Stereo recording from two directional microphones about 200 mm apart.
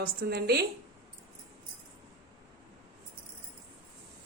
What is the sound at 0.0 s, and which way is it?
Speech, 50° right (ahead or behind).